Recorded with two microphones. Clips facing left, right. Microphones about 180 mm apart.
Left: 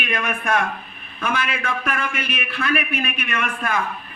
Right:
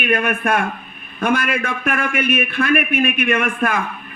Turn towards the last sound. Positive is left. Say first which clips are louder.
# right 6 dB
turn(degrees=-50)  # may be behind; listen again after turning